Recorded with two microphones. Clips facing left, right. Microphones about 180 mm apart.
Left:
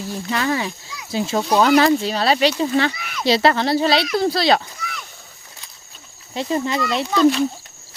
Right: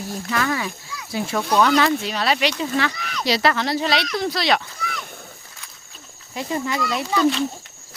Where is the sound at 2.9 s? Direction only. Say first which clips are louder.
Right 1 dB; 5° left (ahead or behind).